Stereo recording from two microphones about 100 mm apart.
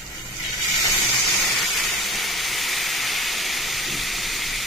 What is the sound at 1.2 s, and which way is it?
Steam, centre (ahead or behind).